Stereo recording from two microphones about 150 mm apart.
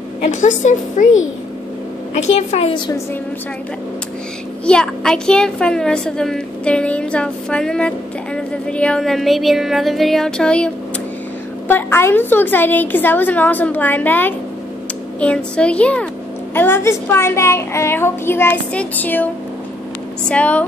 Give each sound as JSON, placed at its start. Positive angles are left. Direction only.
{"t": 0.2, "sound": "a woman's voice", "side_deg": 50}
{"t": 2.3, "sound": "a woman's voice", "side_deg": 45}
{"t": 4.6, "sound": "a woman's voice", "side_deg": 5}
{"t": 20.2, "sound": "a woman's voice", "side_deg": 10}